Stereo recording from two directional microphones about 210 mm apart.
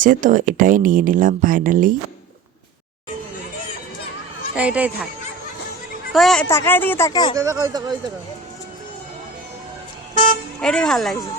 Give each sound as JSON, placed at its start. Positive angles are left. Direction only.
{"t": 0.0, "sound": "speech", "side_deg": -40}
{"t": 4.5, "sound": "speech", "side_deg": -5}
{"t": 6.1, "sound": "speech", "side_deg": 0}
{"t": 7.3, "sound": "speech", "side_deg": -15}
{"t": 10.6, "sound": "speech", "side_deg": 5}